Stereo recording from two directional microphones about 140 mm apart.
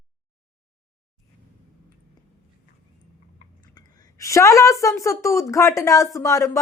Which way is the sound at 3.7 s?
25° left (ahead or behind).